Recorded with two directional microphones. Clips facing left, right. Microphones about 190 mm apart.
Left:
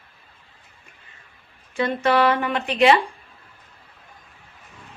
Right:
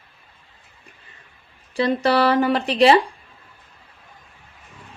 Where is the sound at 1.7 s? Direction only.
35° right (ahead or behind).